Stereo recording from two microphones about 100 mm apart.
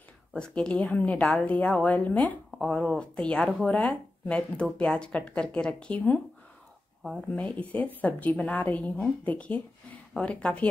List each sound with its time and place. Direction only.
0.3 s a woman's voice: 10° left (ahead or behind)
7.0 s speech: 5° right (ahead or behind)
7.3 s a woman's voice: 15° left (ahead or behind)